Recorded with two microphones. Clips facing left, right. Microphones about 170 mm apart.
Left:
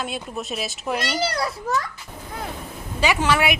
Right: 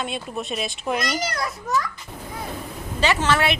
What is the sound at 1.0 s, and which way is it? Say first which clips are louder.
Speech: left 5 dB; 30° left (ahead or behind).